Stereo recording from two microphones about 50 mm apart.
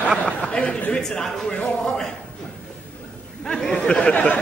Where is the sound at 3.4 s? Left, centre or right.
Centre.